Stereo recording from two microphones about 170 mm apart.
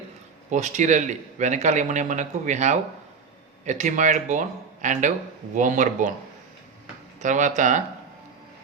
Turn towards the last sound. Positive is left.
turn(degrees=-45)  # may be behind; listen again after turning